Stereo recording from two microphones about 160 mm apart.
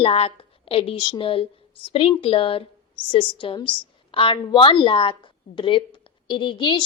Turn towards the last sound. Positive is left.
turn(degrees=30)  # may be behind; listen again after turning